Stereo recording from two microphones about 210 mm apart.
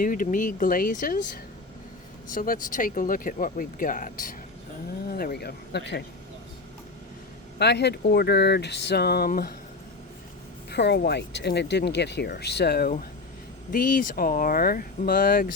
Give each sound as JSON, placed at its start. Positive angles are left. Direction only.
{"t": 0.0, "sound": "speech", "side_deg": 40}
{"t": 2.3, "sound": "speech", "side_deg": 40}
{"t": 7.6, "sound": "speech", "side_deg": 55}
{"t": 10.7, "sound": "speech", "side_deg": 55}